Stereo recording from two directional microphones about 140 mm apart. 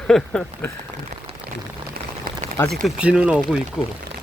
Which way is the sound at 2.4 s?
55° right (ahead or behind).